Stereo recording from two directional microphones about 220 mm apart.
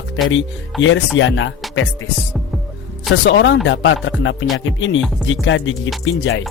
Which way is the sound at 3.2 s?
55° left (ahead or behind).